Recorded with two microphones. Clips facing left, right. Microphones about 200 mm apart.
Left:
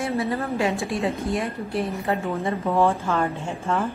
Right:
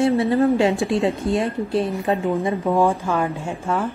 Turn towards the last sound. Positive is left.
turn(degrees=0)  # may be behind; listen again after turning